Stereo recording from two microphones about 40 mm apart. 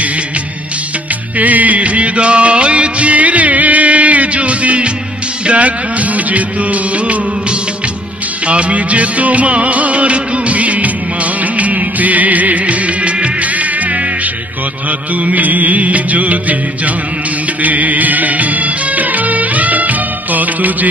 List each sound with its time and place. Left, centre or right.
1.4 s music: right
8.5 s music: right